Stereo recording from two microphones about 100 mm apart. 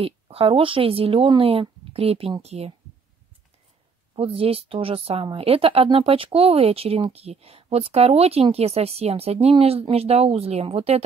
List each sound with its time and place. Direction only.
0.0 s speech: 70° right (ahead or behind)
2.4 s speech: 90° right
4.1 s speech: 70° right (ahead or behind); by 11.0 s 90° right